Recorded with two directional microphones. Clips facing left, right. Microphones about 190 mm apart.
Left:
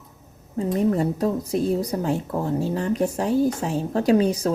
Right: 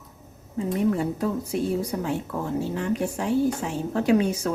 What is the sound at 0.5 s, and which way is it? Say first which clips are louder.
A woman's voice: left 2 dB; 40° left (ahead or behind).